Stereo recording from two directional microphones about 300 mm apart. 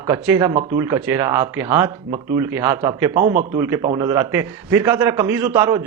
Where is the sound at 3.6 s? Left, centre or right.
Centre.